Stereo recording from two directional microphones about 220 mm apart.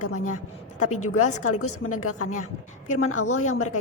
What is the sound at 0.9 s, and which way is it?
A woman's voice, 85° left.